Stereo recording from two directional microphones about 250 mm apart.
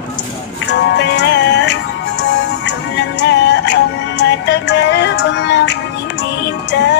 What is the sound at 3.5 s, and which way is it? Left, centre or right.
Music, left.